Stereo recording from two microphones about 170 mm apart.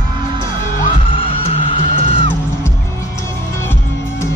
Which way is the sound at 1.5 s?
35° left (ahead or behind).